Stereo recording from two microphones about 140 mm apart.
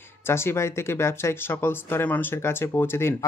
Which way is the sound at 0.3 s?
20° left (ahead or behind).